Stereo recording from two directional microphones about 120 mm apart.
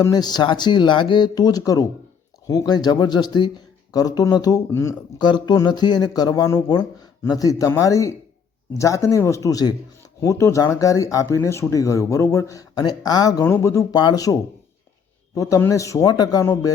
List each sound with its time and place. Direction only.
0.0 s speech: 35° left (ahead or behind)
5.2 s speech: 35° left (ahead or behind)
13.9 s speech: 35° left (ahead or behind)
15.4 s speech: 25° left (ahead or behind)